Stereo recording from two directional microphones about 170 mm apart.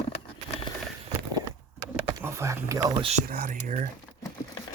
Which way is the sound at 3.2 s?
55° right (ahead or behind).